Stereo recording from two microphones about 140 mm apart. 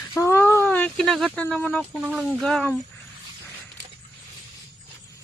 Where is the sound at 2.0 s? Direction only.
10° right (ahead or behind).